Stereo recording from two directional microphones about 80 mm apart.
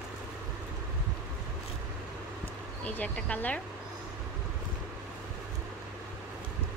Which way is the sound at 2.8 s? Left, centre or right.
Centre.